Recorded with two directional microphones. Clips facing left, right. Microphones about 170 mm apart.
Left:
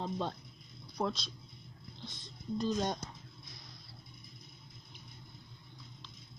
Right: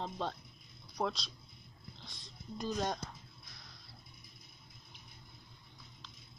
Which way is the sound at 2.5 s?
Centre (ahead or behind).